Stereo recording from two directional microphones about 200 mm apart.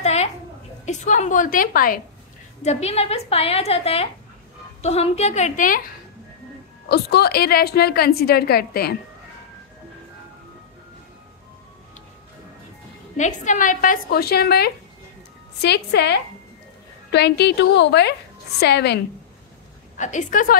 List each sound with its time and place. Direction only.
0.0 s a sound: 35° left (ahead or behind)
0.8 s a woman's voice: 35° left (ahead or behind)
2.6 s a woman's voice: 30° left (ahead or behind)
6.9 s a woman's voice: 50° left (ahead or behind)
13.2 s a woman's voice: 35° left (ahead or behind); by 18.9 s 55° left (ahead or behind)
20.0 s a woman's voice: 40° left (ahead or behind)